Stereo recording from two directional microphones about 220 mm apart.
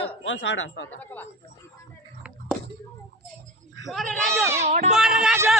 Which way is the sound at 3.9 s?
Centre (ahead or behind).